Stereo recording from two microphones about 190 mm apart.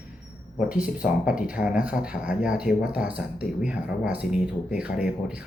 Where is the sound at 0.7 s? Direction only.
5° right (ahead or behind).